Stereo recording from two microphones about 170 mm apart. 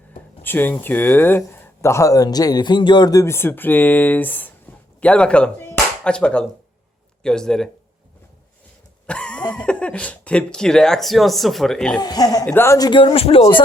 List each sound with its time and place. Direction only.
0.4 s speech: 10° left (ahead or behind)
9.0 s a sound: 5° left (ahead or behind)
9.5 s speech: 5° left (ahead or behind)
11.9 s speech: 20° left (ahead or behind)